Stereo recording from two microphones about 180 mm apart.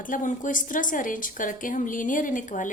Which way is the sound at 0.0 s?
45° left (ahead or behind).